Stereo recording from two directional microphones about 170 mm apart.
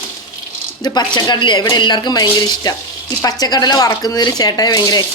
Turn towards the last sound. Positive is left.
turn(degrees=20)  # may be behind; listen again after turning